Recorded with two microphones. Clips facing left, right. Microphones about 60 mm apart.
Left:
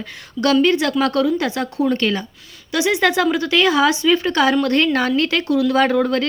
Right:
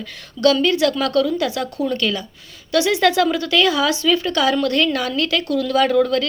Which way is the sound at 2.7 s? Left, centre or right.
Left.